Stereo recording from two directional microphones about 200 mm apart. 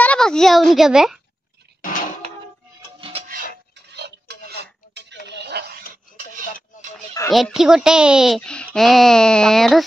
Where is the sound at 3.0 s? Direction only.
25° right (ahead or behind).